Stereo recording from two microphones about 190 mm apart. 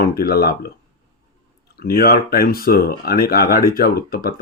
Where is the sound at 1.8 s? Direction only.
55° left (ahead or behind).